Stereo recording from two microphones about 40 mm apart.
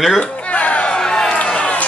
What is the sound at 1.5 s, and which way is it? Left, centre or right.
Music, left.